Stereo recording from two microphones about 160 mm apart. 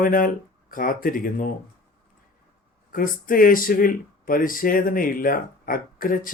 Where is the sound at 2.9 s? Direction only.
60° left (ahead or behind).